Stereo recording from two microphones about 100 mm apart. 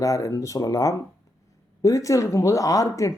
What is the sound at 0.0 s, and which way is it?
Speech, 35° left (ahead or behind).